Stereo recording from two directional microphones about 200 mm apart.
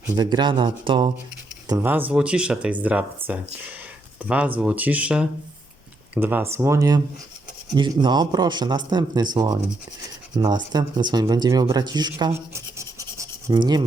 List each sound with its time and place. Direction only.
0.2 s speech: 20° right (ahead or behind)
1.6 s speech: 15° right (ahead or behind)